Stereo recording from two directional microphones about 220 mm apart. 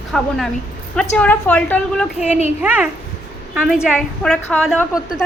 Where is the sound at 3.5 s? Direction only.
Centre (ahead or behind).